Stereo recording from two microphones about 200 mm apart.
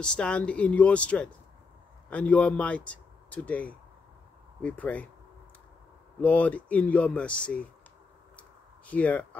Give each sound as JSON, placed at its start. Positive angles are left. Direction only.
{"t": 0.0, "sound": "a man's voice", "side_deg": 5}
{"t": 6.2, "sound": "speech", "side_deg": 5}
{"t": 8.4, "sound": "a sound", "side_deg": 5}